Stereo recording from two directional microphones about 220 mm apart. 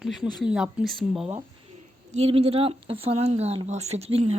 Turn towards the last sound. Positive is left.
turn(degrees=-30)  # may be behind; listen again after turning